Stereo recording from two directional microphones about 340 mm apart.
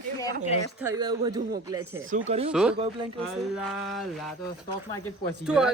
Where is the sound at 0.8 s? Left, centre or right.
Centre.